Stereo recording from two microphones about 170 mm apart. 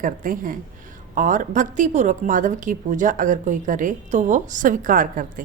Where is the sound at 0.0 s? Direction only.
50° right (ahead or behind).